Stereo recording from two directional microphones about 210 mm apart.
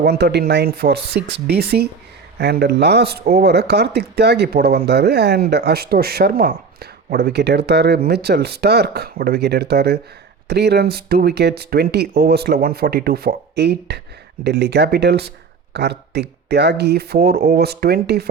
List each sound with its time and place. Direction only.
0.0 s speech: 50° right (ahead or behind)